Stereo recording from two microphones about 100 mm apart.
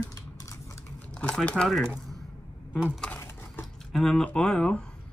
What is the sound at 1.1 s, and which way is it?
Speech, 10° left (ahead or behind).